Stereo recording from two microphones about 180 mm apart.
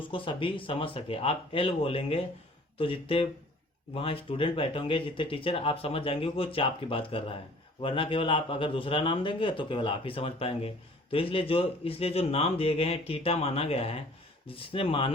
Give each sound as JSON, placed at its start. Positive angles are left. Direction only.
{"t": 0.1, "sound": "a man's voice", "side_deg": 30}